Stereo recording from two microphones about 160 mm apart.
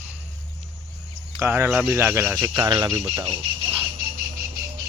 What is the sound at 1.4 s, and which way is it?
Speech, 15° right (ahead or behind).